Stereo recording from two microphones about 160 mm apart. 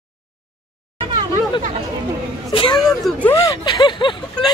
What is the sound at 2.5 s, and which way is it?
Hubbub, 30° left (ahead or behind).